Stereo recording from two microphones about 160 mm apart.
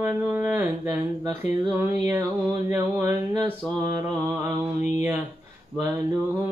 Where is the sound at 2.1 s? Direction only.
15° right (ahead or behind).